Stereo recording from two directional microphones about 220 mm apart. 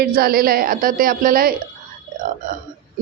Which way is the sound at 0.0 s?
45° right (ahead or behind).